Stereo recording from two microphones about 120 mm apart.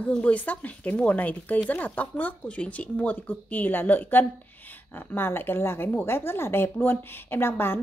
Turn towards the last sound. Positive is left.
turn(degrees=20)  # may be behind; listen again after turning